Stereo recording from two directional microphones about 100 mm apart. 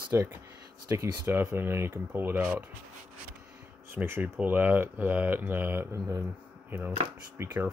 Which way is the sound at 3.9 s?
25° right (ahead or behind).